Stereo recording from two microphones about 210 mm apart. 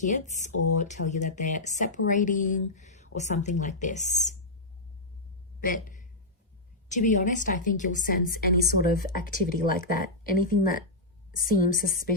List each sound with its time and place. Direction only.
0.0 s a woman's voice: 35° left (ahead or behind)
5.6 s a woman's voice: 40° left (ahead or behind)